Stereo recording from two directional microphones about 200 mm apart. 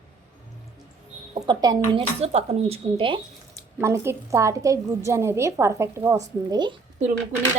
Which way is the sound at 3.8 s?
15° right (ahead or behind).